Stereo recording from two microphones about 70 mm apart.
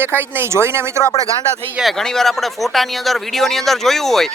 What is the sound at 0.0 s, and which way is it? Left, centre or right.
Speech, right.